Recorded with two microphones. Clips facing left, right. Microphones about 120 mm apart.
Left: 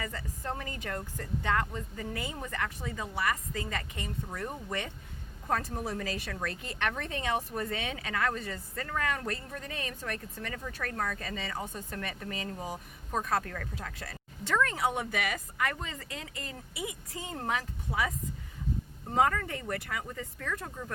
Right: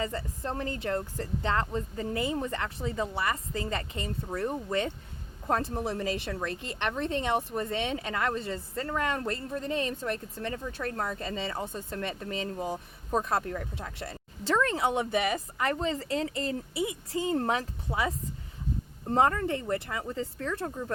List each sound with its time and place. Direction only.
0.0 s speech: 25° right (ahead or behind)
19.2 s speech: 30° right (ahead or behind)